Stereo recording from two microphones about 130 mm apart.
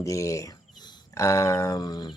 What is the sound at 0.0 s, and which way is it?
Speech, 25° left (ahead or behind).